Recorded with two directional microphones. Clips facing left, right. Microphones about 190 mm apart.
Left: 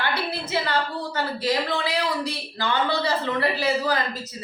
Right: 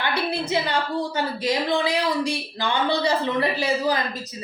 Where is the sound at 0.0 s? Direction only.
15° right (ahead or behind).